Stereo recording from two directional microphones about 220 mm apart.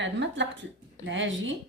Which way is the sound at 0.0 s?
55° right (ahead or behind).